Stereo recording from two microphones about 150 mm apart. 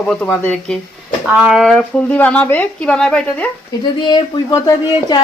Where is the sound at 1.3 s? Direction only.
5° right (ahead or behind).